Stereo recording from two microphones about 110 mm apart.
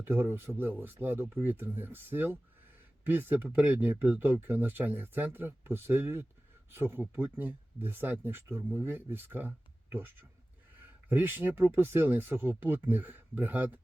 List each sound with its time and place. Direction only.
0.0 s speech: 20° right (ahead or behind)